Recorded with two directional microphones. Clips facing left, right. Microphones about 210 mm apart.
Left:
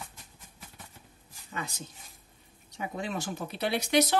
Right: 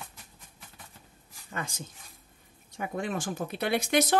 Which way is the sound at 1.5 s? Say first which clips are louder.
Right 1 dB; 45° right (ahead or behind).